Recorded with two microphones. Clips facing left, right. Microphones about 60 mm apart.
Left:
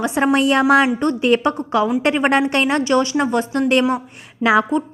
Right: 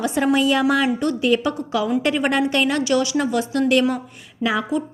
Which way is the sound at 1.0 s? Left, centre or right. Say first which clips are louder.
Left 3 dB; left.